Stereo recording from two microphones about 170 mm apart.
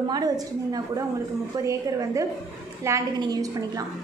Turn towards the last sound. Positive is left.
turn(degrees=-20)  # may be behind; listen again after turning